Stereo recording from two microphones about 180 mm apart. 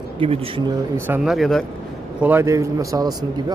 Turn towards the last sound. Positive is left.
turn(degrees=-20)  # may be behind; listen again after turning